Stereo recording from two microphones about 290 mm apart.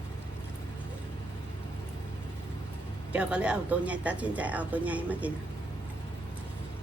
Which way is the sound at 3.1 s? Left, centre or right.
Centre.